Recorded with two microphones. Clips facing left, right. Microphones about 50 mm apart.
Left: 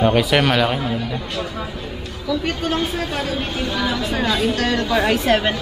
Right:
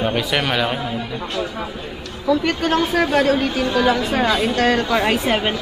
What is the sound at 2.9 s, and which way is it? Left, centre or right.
A woman's voice, right.